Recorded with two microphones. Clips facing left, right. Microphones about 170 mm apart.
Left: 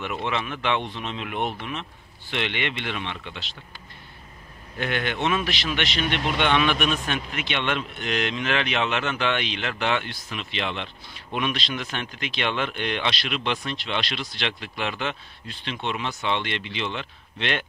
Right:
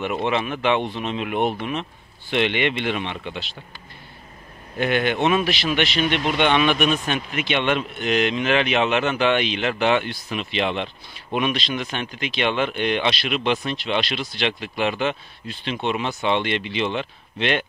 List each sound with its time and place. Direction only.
0.0 s speech: 20° right (ahead or behind)
4.7 s speech: 10° right (ahead or behind)